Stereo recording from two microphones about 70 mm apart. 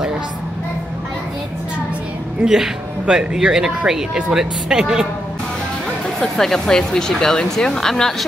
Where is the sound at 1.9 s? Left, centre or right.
Centre.